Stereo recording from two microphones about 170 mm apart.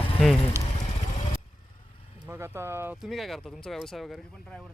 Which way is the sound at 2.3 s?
15° right (ahead or behind).